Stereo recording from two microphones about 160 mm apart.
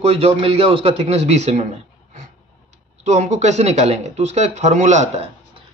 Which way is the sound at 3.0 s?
45° right (ahead or behind).